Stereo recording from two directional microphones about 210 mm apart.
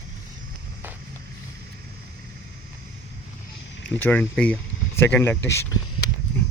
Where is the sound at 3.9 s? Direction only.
10° left (ahead or behind).